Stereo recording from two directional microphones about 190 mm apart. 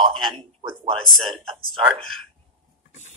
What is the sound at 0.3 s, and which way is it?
Speech, 30° right (ahead or behind).